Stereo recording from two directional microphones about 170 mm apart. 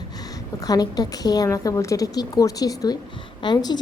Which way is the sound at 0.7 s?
20° left (ahead or behind).